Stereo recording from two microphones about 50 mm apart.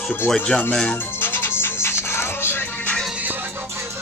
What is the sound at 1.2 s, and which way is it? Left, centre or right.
Music, left.